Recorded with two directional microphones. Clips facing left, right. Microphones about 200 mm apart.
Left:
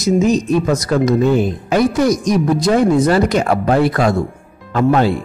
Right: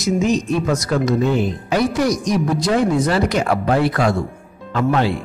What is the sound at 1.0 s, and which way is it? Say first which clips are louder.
Speech: left 4 dB; 45° left (ahead or behind).